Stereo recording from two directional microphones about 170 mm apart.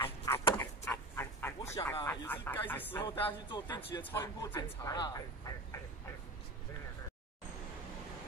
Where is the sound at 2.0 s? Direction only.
15° left (ahead or behind).